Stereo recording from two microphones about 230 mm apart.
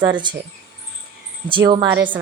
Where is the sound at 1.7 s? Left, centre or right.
Centre.